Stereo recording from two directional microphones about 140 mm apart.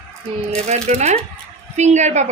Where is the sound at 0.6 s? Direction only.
50° right (ahead or behind).